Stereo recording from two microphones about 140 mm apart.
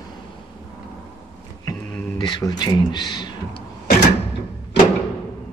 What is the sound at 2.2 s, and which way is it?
Speech, 30° left (ahead or behind).